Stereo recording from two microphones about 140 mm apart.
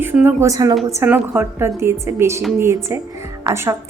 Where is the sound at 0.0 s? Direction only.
15° right (ahead or behind).